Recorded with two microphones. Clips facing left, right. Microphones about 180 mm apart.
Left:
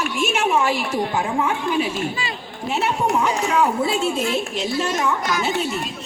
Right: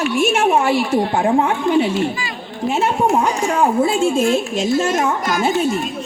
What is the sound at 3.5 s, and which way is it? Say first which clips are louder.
A woman's voice: right 5 dB; 50° right (ahead or behind).